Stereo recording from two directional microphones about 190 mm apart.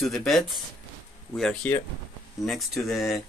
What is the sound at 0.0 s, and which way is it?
Speech, centre (ahead or behind).